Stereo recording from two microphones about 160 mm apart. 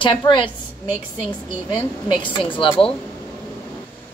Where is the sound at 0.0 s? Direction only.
30° left (ahead or behind).